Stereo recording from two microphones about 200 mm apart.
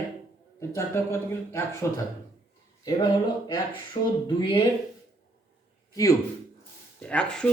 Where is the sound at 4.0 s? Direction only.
30° left (ahead or behind).